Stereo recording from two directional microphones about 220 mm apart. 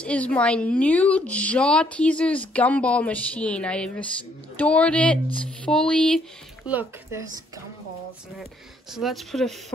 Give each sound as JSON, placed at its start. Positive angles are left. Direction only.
{"t": 0.0, "sound": "a woman's voice", "side_deg": 5}
{"t": 6.7, "sound": "speech", "side_deg": -10}
{"t": 8.9, "sound": "a woman's voice", "side_deg": 0}